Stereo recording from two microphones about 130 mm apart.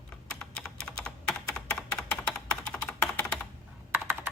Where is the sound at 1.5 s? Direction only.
5° left (ahead or behind).